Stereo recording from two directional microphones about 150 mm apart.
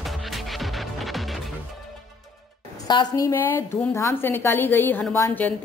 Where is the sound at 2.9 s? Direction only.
30° left (ahead or behind).